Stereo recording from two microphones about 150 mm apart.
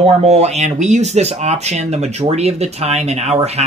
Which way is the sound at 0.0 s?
45° right (ahead or behind).